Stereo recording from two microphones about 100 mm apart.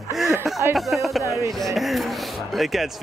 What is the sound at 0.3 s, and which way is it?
Speech, 30° right (ahead or behind).